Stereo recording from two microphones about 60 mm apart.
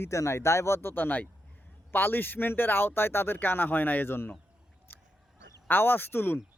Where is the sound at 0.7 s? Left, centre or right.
Left.